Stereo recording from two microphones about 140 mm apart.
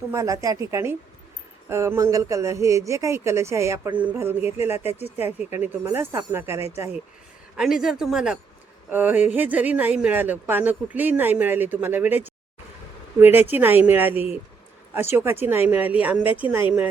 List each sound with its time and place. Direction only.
0.1 s speech: 20° right (ahead or behind)
7.5 s speech: 5° right (ahead or behind)